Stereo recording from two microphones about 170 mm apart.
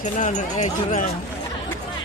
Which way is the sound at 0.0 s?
45° left (ahead or behind).